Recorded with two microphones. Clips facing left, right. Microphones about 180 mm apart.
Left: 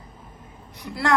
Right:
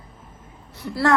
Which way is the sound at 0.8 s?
15° left (ahead or behind).